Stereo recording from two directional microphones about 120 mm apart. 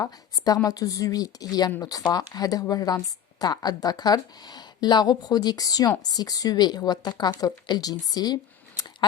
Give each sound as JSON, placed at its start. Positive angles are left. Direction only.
{"t": 0.0, "sound": "speech", "side_deg": 30}